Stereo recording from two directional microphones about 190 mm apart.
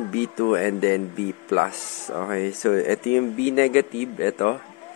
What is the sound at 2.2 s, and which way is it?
Speech, 60° left (ahead or behind).